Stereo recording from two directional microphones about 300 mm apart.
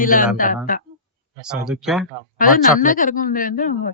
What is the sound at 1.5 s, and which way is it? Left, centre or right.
Speech, centre.